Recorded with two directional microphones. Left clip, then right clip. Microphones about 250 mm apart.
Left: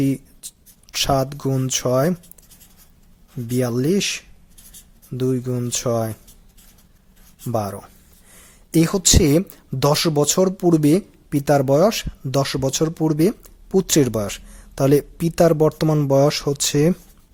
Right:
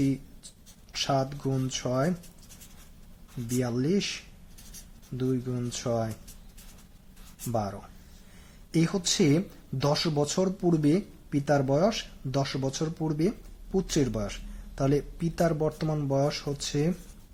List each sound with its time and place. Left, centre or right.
0.9 s speech: left
3.6 s speech: left
7.4 s speech: left